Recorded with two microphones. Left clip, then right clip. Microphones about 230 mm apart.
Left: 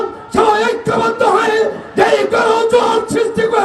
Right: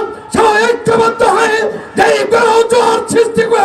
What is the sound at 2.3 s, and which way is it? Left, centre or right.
Speech, right.